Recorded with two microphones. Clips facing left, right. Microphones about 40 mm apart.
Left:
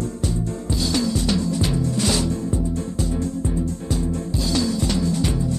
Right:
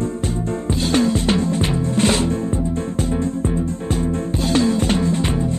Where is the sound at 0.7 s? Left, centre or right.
Right.